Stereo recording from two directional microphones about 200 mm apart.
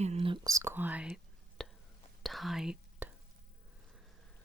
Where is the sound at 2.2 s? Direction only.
Centre (ahead or behind).